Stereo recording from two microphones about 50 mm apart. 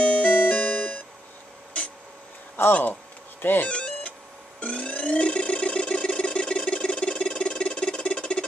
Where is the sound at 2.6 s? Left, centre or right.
Left.